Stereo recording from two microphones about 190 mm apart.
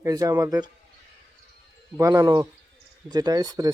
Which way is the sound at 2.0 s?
20° right (ahead or behind).